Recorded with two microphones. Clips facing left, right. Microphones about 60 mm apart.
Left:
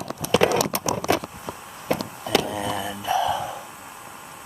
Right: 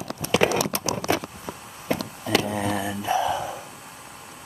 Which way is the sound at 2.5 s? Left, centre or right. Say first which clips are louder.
Right 1 dB; right.